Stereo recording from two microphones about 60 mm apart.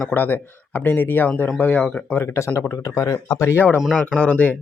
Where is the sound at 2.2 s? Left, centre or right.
Left.